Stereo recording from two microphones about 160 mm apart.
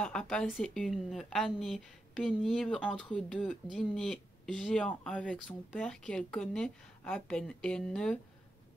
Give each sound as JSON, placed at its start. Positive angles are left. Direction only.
{"t": 0.0, "sound": "speech", "side_deg": 5}